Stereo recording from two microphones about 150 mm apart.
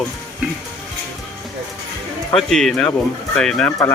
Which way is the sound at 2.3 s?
5° left (ahead or behind).